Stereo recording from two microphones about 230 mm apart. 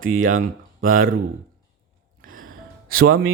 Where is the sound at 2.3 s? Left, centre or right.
Right.